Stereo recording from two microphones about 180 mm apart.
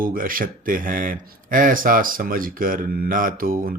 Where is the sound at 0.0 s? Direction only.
50° right (ahead or behind).